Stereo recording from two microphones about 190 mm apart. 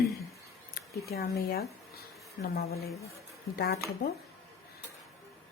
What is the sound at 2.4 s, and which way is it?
A woman's voice, 55° left (ahead or behind).